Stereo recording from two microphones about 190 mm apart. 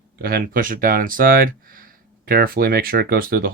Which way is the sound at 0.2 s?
55° right (ahead or behind).